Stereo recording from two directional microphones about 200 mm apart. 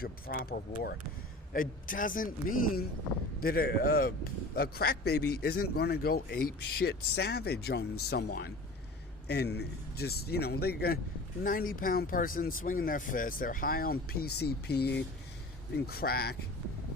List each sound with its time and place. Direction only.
0.0 s a man's voice: 50° left (ahead or behind)